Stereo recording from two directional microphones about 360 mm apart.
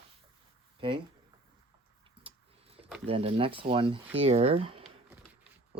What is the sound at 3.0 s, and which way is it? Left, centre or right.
Speech, centre.